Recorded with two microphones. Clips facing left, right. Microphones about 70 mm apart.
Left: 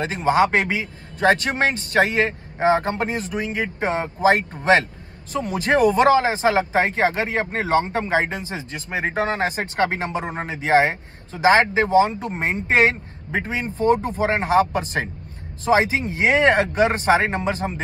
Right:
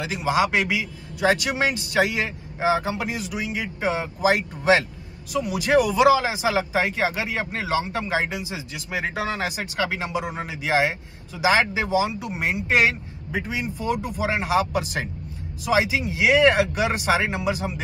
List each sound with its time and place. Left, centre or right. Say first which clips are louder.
0.0 s speech: left 4 dB; left